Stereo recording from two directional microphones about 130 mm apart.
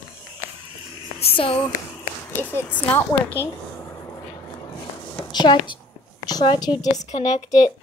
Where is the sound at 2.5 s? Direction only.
15° left (ahead or behind).